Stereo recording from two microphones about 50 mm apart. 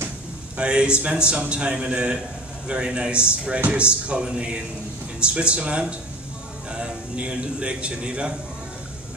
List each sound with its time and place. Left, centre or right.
0.6 s a man's voice: centre